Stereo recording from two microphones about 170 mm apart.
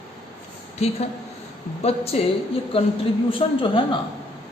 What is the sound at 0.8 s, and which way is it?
Speech, 40° left (ahead or behind).